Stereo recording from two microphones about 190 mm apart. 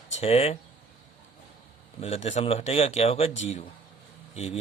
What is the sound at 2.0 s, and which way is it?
Speech, 30° left (ahead or behind).